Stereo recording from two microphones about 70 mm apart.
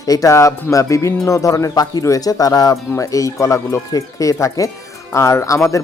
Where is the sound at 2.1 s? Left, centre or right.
Left.